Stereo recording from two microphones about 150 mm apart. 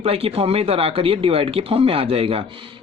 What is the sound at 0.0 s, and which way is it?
Speech, 40° right (ahead or behind).